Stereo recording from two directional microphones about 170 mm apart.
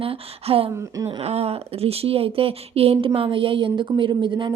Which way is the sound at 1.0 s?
35° right (ahead or behind).